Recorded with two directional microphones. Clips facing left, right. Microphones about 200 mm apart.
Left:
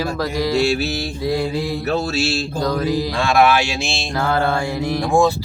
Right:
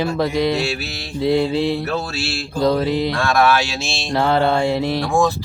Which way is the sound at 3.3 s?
15° left (ahead or behind).